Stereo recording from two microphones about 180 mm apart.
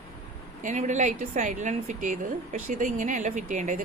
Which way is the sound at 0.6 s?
40° right (ahead or behind).